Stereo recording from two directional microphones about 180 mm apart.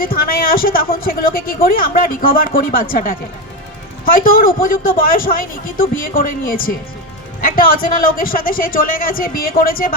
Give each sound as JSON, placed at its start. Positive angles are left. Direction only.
{"t": 0.0, "sound": "a man's voice", "side_deg": 55}